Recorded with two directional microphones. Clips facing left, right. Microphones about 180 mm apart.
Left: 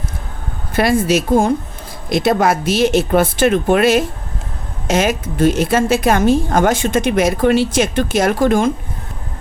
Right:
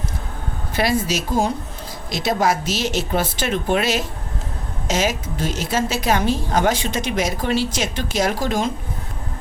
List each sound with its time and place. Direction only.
0.7 s a woman's voice: 50° left (ahead or behind)